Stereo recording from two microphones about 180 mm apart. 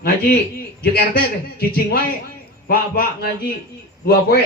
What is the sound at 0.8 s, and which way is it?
A man's voice, 60° left (ahead or behind).